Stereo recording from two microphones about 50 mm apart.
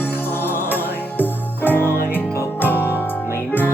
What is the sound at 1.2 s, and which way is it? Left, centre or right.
Music, left.